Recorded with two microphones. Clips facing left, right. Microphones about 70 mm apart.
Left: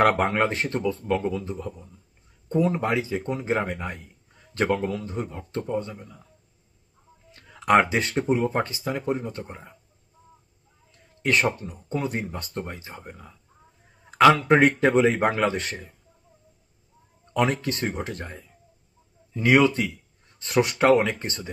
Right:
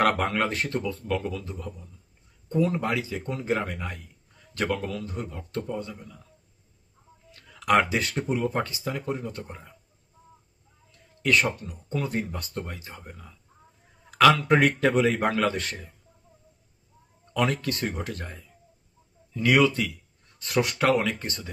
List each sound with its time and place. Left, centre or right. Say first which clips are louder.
0.0 s a man's voice: left 3 dB; left
7.3 s a man's voice: left 3 dB; left
11.2 s a man's voice: left 1 dB; left
13.5 s a sound: even; centre
14.0 s a man's voice: left 2 dB; left
17.3 s a man's voice: left 2 dB; left